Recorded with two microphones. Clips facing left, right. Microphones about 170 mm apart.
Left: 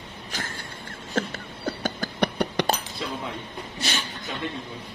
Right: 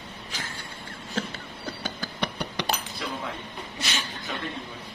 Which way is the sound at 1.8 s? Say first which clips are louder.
Left 6 dB; 45° left (ahead or behind).